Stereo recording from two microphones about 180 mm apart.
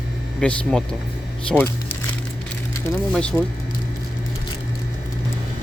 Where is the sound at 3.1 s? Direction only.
5° left (ahead or behind).